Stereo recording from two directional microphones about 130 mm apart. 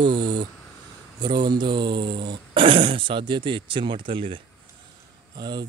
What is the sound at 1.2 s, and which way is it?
Speech, 35° right (ahead or behind).